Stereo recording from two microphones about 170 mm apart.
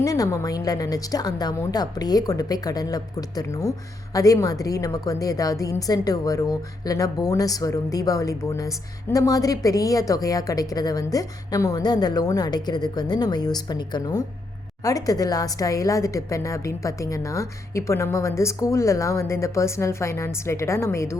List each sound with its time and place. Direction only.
0.0 s a woman's voice: 20° left (ahead or behind)